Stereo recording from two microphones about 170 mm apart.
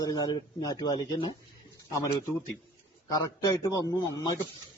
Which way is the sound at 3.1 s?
20° left (ahead or behind).